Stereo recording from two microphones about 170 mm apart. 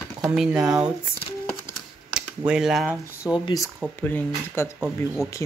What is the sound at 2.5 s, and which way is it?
Speech, 5° right (ahead or behind).